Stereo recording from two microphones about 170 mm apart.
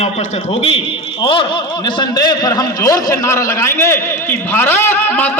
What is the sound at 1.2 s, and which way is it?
A man's voice, 30° left (ahead or behind).